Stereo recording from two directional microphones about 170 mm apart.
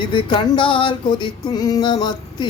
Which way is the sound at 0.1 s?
30° left (ahead or behind).